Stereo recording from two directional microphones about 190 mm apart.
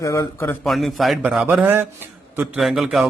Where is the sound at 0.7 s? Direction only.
Centre (ahead or behind).